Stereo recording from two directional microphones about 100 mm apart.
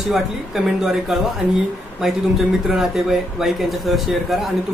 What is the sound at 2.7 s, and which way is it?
Speech, 5° right (ahead or behind).